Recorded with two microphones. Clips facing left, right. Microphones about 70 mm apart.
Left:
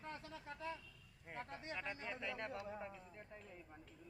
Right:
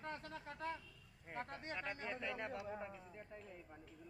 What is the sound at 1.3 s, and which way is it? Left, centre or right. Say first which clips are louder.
Speech: right 2 dB; right.